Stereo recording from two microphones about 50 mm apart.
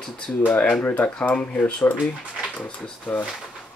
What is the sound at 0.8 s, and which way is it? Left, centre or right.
Speech, left.